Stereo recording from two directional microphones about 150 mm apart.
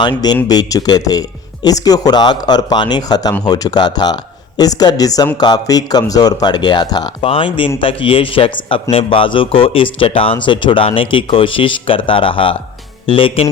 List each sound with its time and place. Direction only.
0.0 s a man's voice: 30° left (ahead or behind)